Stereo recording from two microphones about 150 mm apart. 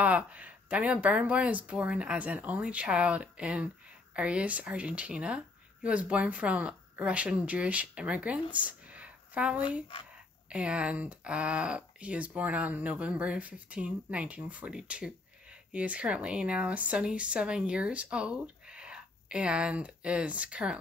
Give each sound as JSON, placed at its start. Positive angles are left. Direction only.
{"t": 0.0, "sound": "speech", "side_deg": -10}